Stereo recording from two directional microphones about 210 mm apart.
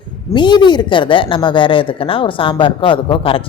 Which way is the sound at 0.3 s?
20° left (ahead or behind).